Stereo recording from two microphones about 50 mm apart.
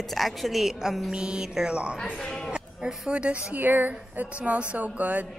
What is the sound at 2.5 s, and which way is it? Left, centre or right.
Speech, centre.